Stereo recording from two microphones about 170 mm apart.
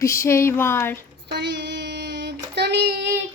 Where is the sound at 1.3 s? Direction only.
90° right.